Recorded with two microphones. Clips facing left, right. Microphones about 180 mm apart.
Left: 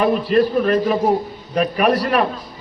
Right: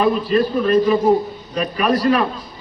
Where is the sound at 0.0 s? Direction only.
65° left (ahead or behind).